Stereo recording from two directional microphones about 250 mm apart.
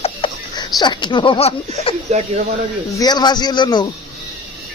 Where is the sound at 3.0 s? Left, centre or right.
Centre.